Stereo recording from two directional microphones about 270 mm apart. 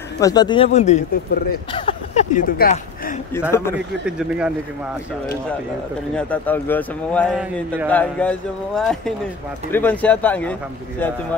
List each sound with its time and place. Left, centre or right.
0.2 s speech: centre; by 3.2 s left
4.0 s a man's voice: centre
6.1 s a man's voice: centre